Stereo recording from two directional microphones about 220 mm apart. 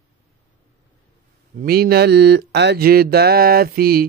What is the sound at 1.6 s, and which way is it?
Mantra, 45° right (ahead or behind).